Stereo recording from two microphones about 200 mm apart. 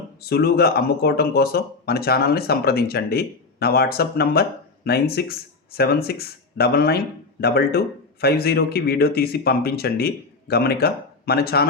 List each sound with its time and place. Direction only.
0.2 s speech: 50° left (ahead or behind)